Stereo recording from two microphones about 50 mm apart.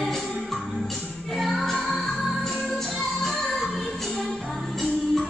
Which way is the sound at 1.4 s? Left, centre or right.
Centre.